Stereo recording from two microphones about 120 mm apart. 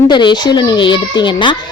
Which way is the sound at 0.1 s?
40° left (ahead or behind).